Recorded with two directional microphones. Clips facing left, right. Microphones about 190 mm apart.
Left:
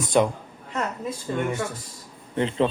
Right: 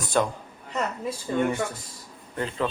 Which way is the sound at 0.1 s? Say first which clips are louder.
Left 4 dB; 15° left (ahead or behind).